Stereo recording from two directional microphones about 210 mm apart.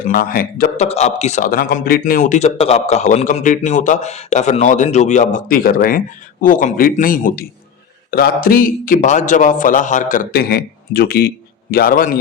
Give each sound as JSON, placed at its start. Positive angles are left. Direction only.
{"t": 0.0, "sound": "speech", "side_deg": 45}
{"t": 0.9, "sound": "speech", "side_deg": 30}